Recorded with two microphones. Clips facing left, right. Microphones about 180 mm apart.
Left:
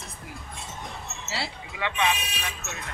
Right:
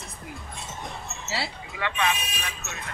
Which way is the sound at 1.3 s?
Centre (ahead or behind).